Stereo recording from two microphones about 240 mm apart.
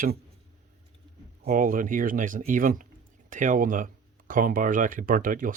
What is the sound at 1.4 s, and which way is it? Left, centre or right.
Speech, right.